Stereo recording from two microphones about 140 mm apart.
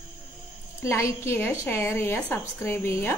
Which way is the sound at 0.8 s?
20° left (ahead or behind).